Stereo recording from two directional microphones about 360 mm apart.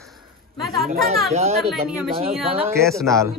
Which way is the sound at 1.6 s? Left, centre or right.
Centre.